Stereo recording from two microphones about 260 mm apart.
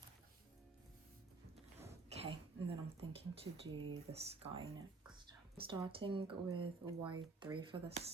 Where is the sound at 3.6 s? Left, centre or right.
Right.